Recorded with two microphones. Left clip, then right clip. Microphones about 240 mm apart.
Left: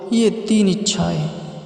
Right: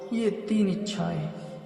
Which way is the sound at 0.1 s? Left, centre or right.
Left.